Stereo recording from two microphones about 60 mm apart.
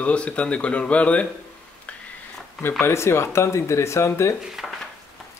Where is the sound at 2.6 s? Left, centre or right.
Left.